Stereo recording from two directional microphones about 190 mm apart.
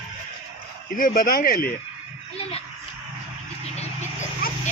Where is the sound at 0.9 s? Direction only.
45° left (ahead or behind).